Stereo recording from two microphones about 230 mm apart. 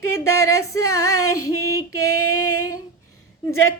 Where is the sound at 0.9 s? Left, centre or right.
Left.